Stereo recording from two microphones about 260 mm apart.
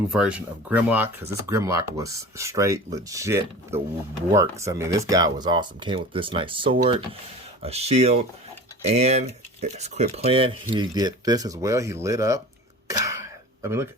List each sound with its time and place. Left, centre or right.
0.2 s speech: centre